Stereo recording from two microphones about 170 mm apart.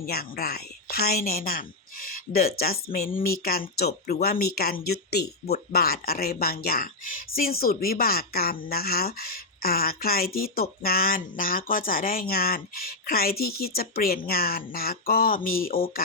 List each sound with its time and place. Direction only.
0.0 s a woman's voice: 65° left (ahead or behind)